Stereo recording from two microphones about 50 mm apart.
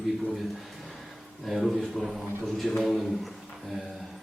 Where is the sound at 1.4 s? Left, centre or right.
Centre.